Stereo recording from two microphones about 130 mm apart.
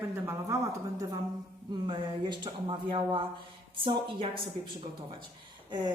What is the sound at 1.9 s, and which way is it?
Speech, 40° right (ahead or behind).